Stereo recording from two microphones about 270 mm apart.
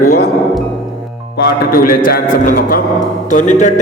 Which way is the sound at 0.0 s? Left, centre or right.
Left.